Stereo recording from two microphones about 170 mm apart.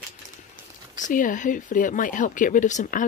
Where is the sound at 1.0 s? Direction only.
50° left (ahead or behind).